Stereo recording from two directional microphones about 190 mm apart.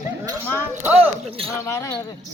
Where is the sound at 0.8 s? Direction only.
10° right (ahead or behind).